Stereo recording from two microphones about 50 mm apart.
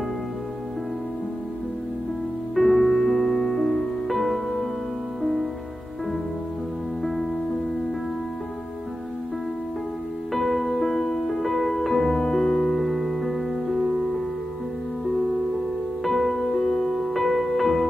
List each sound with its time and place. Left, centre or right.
2.5 s music: centre
10.3 s music: centre
16.0 s music: centre